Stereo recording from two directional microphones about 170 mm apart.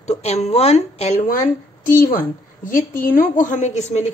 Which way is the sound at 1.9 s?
55° left (ahead or behind).